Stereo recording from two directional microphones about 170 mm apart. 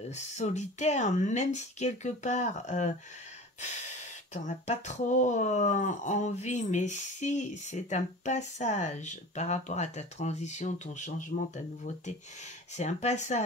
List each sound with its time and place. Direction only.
0.1 s speech: 40° left (ahead or behind)
4.3 s speech: 45° left (ahead or behind)